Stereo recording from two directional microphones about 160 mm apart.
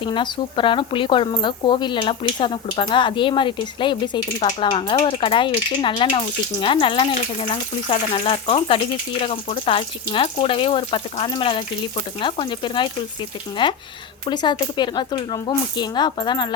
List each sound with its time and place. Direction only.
0.0 s speech: 30° left (ahead or behind)